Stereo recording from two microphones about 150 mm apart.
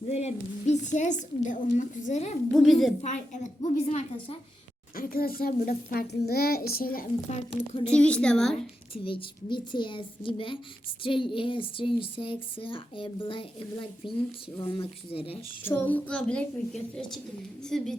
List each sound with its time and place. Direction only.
0.1 s a woman's voice: 45° left (ahead or behind)
2.5 s a woman's voice: 5° left (ahead or behind)
3.0 s a woman's voice: 55° left (ahead or behind)
4.9 s a child's voice: 80° left
7.3 s a woman's voice: 45° left (ahead or behind)
7.9 s a woman's voice: 10° left (ahead or behind)
8.9 s speech: 35° left (ahead or behind)
15.6 s a woman's voice: 10° left (ahead or behind)